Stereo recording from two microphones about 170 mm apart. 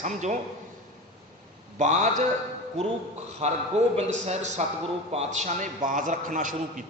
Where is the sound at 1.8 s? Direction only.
45° right (ahead or behind).